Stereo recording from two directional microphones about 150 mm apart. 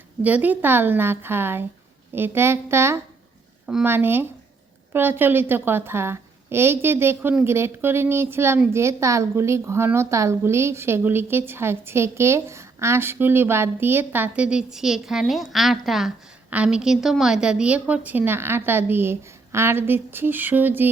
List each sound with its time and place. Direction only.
0.2 s a woman's voice: 10° right (ahead or behind)